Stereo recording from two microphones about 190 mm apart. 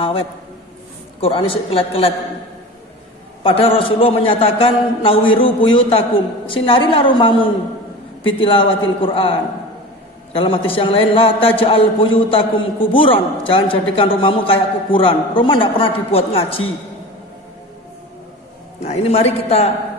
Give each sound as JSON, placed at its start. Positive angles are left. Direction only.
{"t": 1.2, "sound": "a man's voice", "side_deg": 30}
{"t": 3.4, "sound": "a man's voice", "side_deg": 30}
{"t": 18.8, "sound": "a man's voice", "side_deg": 35}